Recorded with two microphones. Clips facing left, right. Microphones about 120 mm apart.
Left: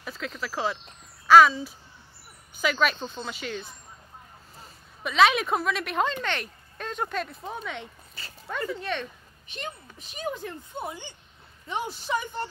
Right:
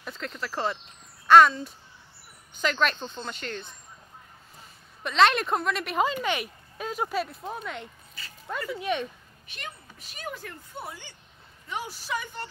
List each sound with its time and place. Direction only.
0.0 s speech: centre (ahead or behind)
5.0 s speech: 5° left (ahead or behind)
9.5 s speech: 25° left (ahead or behind)